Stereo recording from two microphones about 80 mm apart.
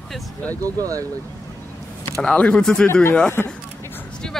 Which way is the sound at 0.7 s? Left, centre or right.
Right.